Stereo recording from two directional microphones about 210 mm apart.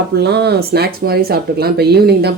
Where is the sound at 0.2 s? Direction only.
50° right (ahead or behind).